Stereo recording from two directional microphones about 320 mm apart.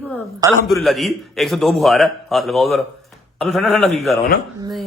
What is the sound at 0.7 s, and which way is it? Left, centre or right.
Speech, centre.